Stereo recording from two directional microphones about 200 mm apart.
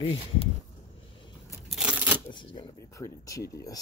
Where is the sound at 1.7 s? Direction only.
5° right (ahead or behind).